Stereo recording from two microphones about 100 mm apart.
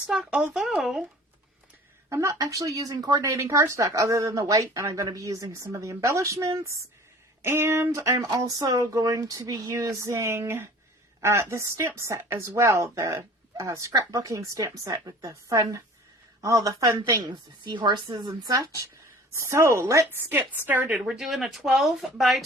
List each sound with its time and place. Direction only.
0.1 s speech: 10° right (ahead or behind)
2.0 s speech: 30° right (ahead or behind)
7.4 s a sound: 25° right (ahead or behind)
8.3 s speech: 35° right (ahead or behind)
17.2 s a woman's voice: 50° right (ahead or behind); by 18.9 s 35° right (ahead or behind)
19.3 s a sound: 30° right (ahead or behind)
20.3 s speech: 20° right (ahead or behind); by 22.4 s centre (ahead or behind)